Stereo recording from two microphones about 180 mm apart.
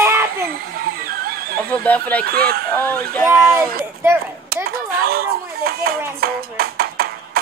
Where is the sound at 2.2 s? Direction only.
60° right (ahead or behind).